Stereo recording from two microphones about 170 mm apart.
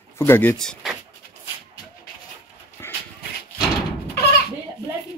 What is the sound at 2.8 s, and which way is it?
Dog, 15° left (ahead or behind).